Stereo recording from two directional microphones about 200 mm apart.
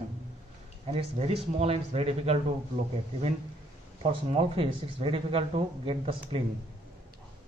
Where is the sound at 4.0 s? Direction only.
30° right (ahead or behind).